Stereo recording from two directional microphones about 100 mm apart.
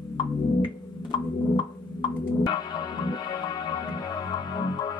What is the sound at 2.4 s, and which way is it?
Music, 45° left (ahead or behind).